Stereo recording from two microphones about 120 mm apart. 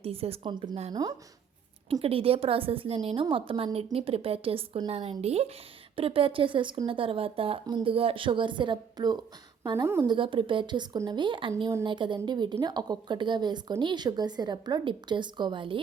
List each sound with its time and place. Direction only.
0.0 s speech: 55° right (ahead or behind)
0.5 s a woman's voice: 40° right (ahead or behind)
1.9 s speech: 55° right (ahead or behind)
9.8 s speech: 20° right (ahead or behind)
10.1 s a woman's voice: 45° right (ahead or behind)